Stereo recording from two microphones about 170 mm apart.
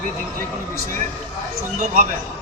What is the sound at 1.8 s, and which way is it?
Speech, 50° right (ahead or behind).